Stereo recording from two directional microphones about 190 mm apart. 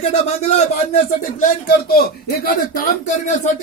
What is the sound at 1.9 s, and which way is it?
A man's voice, 55° left (ahead or behind).